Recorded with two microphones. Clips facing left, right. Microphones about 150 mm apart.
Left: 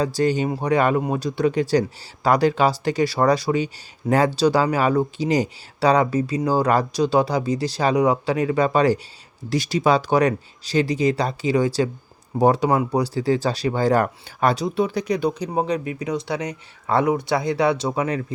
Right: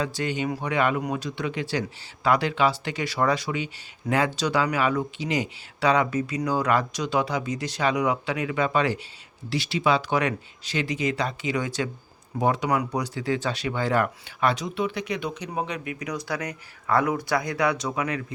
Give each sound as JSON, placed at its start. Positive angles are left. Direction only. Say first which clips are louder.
{"t": 0.0, "sound": "speech", "louder": "left 7 dB", "side_deg": 35}